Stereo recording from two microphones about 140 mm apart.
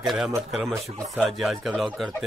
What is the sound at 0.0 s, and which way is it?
Speech, centre (ahead or behind).